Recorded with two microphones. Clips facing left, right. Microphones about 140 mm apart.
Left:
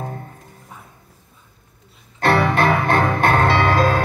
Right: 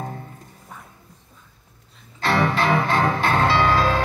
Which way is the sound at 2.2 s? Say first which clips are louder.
Left 4 dB; 55° left (ahead or behind).